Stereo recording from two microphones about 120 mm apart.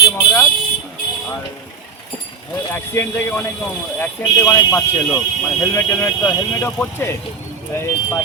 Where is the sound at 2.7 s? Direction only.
20° left (ahead or behind).